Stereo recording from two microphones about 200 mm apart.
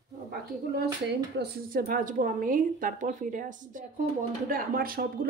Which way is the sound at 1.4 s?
50° right (ahead or behind).